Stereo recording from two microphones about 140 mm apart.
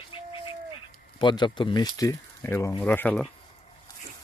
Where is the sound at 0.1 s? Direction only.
40° left (ahead or behind).